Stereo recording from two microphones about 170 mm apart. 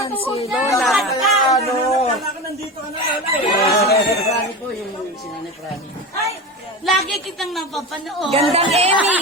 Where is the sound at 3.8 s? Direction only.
70° left (ahead or behind).